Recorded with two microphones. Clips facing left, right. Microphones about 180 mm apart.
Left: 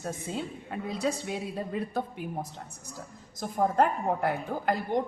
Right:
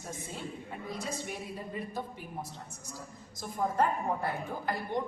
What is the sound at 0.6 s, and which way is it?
A woman's voice, 75° left (ahead or behind).